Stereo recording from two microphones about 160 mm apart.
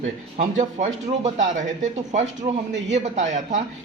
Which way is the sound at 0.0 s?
50° right (ahead or behind).